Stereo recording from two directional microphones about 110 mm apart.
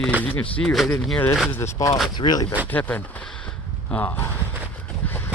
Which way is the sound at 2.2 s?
40° left (ahead or behind).